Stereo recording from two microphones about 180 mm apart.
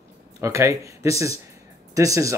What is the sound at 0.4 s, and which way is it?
Speech, 15° right (ahead or behind).